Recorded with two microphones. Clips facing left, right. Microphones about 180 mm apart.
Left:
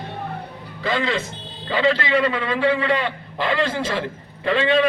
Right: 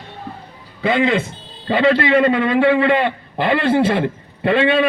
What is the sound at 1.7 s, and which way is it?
A man's voice, 45° right (ahead or behind).